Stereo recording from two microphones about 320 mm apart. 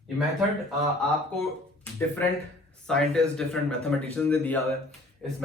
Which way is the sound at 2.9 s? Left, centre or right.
Centre.